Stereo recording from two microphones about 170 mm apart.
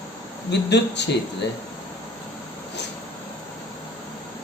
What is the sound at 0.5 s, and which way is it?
Speech, 90° left.